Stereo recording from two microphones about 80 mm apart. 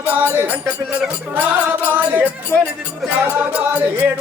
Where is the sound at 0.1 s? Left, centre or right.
Right.